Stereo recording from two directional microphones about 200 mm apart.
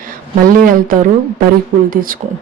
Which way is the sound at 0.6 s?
45° right (ahead or behind).